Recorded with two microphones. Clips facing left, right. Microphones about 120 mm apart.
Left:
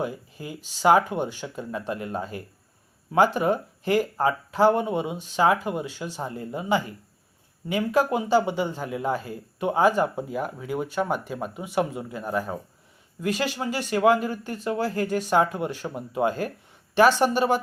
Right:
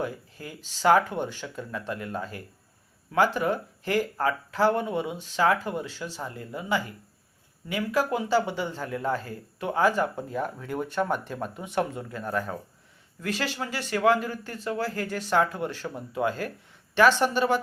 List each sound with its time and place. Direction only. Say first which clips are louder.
0.0 s speech: left 2 dB; 15° left (ahead or behind)